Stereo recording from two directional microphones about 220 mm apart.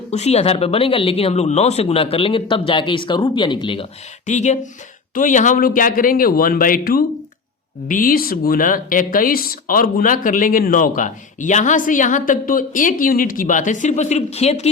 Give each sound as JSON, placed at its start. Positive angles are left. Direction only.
{"t": 0.1, "sound": "speech", "side_deg": 30}
{"t": 4.3, "sound": "speech", "side_deg": 30}